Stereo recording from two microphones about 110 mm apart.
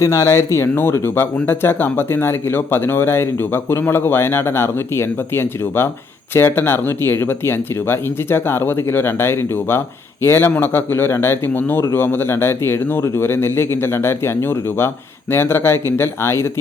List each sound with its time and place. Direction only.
0.0 s speech: 30° left (ahead or behind)